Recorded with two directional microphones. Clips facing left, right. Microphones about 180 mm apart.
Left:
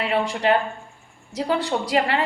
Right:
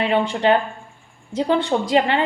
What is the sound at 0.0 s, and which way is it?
A woman's voice, 25° right (ahead or behind).